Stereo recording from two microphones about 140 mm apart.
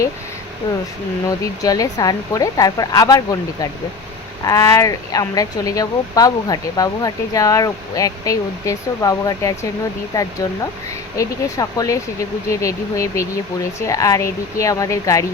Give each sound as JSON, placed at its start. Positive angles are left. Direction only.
{"t": 1.6, "sound": "speech", "side_deg": 25}